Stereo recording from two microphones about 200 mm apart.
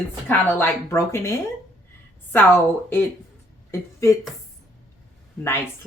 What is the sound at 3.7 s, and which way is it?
Speech, 15° left (ahead or behind).